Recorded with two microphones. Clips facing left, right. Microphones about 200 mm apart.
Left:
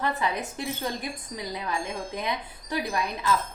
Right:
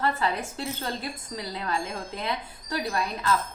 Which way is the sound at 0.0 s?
15° left (ahead or behind).